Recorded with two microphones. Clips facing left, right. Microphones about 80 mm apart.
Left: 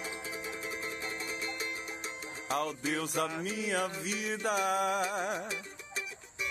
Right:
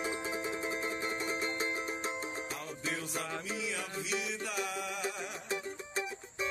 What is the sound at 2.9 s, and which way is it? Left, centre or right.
Music, left.